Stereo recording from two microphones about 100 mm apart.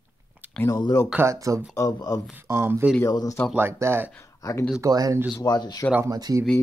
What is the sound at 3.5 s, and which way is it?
Speech, 25° right (ahead or behind).